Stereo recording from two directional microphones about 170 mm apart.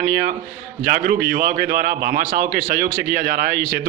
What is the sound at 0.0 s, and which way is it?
Speech, 60° right (ahead or behind).